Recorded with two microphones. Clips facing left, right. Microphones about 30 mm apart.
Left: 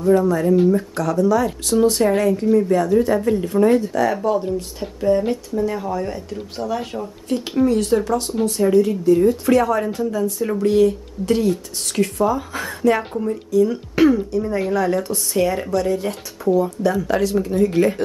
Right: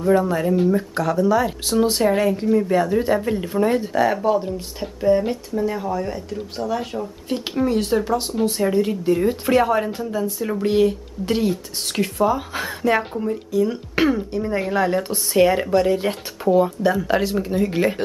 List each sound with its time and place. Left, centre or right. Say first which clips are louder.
0.0 s speech: left 2 dB; right; by 2.3 s centre
2.7 s speech: left 2 dB; right
3.8 s speech: even; right; by 7.1 s centre
7.3 s speech: left 3 dB; centre
8.1 s speech: left 1 dB; centre
8.7 s speech: left 4 dB; right
13.1 s speech: left 1 dB; centre
13.5 s speech: left 6 dB; centre